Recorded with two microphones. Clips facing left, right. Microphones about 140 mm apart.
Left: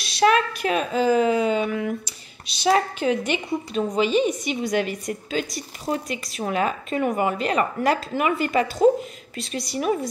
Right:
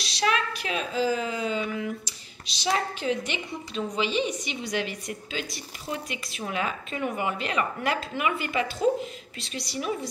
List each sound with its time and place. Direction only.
0.0 s a woman's voice: 55° left (ahead or behind)